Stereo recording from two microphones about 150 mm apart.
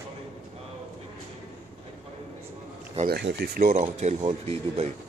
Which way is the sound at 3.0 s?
90° right.